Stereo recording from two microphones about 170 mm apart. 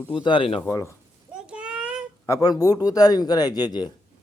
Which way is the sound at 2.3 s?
20° left (ahead or behind).